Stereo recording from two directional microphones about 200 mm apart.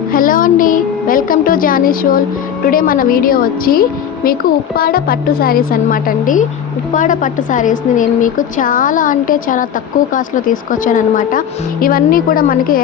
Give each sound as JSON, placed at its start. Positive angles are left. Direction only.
{"t": 0.1, "sound": "music", "side_deg": 45}
{"t": 2.6, "sound": "a woman's voice", "side_deg": 45}